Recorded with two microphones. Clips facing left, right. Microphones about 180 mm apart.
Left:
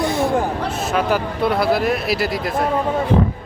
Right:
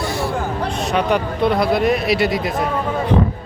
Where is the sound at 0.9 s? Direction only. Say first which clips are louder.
Right 1 dB; 5° left (ahead or behind).